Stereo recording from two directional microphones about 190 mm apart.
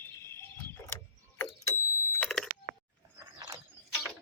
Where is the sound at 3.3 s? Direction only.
20° right (ahead or behind).